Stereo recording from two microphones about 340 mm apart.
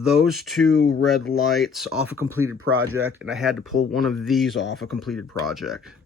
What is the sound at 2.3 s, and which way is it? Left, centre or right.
Speech, right.